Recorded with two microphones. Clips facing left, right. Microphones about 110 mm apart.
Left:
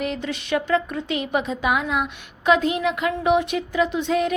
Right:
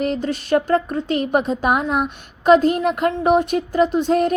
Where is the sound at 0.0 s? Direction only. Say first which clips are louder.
Right 5 dB; 40° right (ahead or behind).